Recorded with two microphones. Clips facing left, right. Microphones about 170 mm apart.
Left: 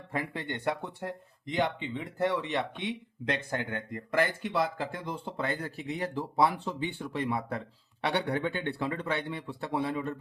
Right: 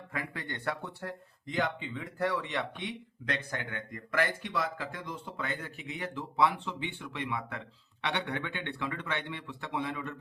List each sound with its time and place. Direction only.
0.1 s speech: 25° left (ahead or behind)